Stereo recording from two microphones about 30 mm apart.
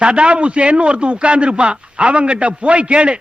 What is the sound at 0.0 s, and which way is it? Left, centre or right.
A man's voice, right.